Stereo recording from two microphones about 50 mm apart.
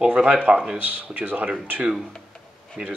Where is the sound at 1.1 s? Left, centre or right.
Right.